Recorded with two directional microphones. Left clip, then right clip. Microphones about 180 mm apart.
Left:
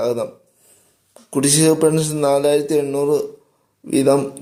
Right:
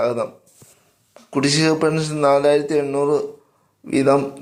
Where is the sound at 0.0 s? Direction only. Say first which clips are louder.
Even; 15° left (ahead or behind).